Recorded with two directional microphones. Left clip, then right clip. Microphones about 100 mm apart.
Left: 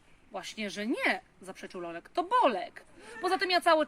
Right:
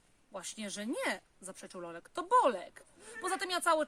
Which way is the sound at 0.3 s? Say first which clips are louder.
Left 5 dB; 35° right (ahead or behind).